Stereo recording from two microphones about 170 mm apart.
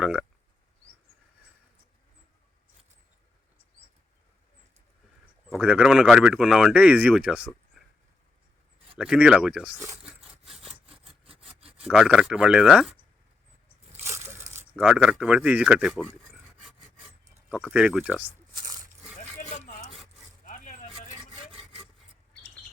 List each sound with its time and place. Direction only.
0.0 s speech: 5° right (ahead or behind)
5.5 s speech: 5° right (ahead or behind)
9.0 s speech: 5° right (ahead or behind)
10.4 s sawing: centre (ahead or behind)
11.8 s speech: 5° right (ahead or behind)
14.0 s a sound: 15° right (ahead or behind)
14.8 s speech: 5° right (ahead or behind)
17.5 s speech: 5° right (ahead or behind)
19.4 s a sound: 45° left (ahead or behind)
20.4 s vehicle: 50° left (ahead or behind)